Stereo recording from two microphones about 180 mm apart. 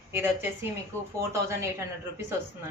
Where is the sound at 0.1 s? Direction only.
10° right (ahead or behind).